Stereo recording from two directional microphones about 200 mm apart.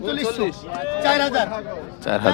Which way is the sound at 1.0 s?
15° right (ahead or behind).